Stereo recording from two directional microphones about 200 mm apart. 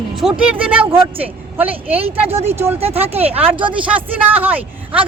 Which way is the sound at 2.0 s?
30° right (ahead or behind).